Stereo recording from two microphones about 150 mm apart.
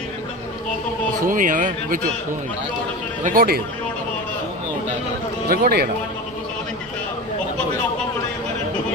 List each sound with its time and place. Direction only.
1.2 s a man's voice: 60° right (ahead or behind)
3.2 s a man's voice: 85° right
5.5 s speech: 90° right